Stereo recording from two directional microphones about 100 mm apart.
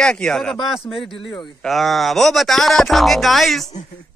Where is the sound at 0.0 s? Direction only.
5° left (ahead or behind).